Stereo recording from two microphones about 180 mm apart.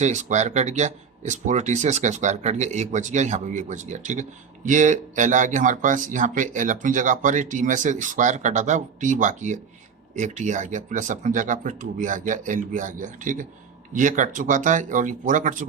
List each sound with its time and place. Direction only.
0.0 s speech: 40° right (ahead or behind)